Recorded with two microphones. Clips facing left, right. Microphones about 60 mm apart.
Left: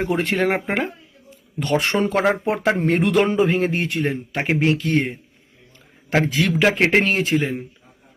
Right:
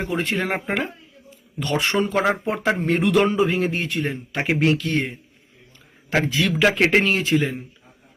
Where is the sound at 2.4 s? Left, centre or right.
Left.